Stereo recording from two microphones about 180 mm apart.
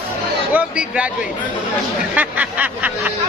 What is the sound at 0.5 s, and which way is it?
Speech, 10° right (ahead or behind).